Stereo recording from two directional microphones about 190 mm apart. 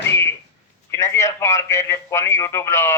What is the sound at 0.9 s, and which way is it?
A man's voice, 15° left (ahead or behind).